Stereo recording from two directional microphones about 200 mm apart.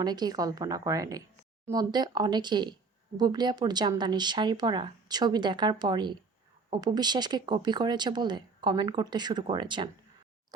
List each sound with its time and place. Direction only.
0.0 s speech: 20° right (ahead or behind)